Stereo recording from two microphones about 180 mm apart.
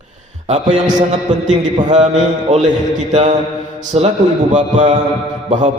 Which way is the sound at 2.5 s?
40° right (ahead or behind).